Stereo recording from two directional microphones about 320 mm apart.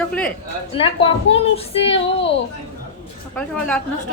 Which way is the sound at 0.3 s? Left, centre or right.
Centre.